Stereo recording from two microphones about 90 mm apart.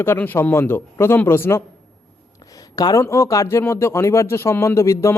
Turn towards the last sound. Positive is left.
turn(degrees=35)  # may be behind; listen again after turning